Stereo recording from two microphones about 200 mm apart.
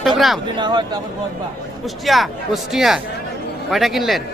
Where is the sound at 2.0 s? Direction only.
Centre (ahead or behind).